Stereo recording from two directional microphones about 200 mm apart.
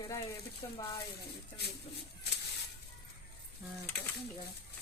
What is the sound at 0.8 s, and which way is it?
Speech, 15° left (ahead or behind).